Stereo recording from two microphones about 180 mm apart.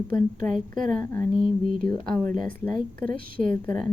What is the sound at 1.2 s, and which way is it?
Speech, 50° right (ahead or behind).